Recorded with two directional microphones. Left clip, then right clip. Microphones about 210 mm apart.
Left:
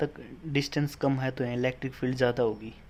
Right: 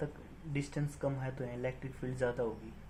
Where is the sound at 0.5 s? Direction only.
50° left (ahead or behind).